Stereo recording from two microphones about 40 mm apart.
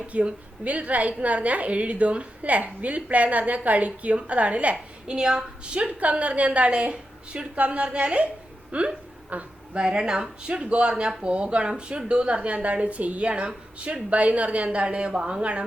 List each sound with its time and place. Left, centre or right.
0.1 s a woman's voice: right
5.1 s a woman's voice: centre; by 9.5 s right
9.7 s a woman's voice: right